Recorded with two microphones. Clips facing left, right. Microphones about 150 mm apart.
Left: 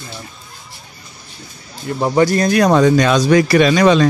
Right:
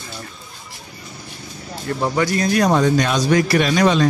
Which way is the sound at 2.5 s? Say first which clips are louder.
Left 4 dB; 85° left.